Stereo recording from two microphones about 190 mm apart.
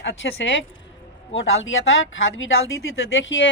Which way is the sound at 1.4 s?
90° left.